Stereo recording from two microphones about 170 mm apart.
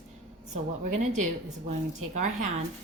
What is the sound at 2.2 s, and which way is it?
Speech, 45° right (ahead or behind).